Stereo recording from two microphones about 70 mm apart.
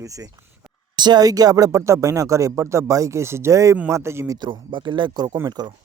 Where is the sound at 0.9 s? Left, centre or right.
Right.